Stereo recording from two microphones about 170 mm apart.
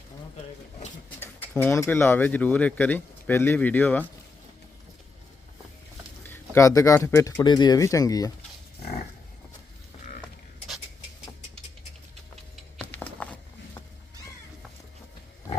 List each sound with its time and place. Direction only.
1.2 s speech: 10° left (ahead or behind)
6.2 s speech: 15° left (ahead or behind)
12.9 s a sound: 10° left (ahead or behind)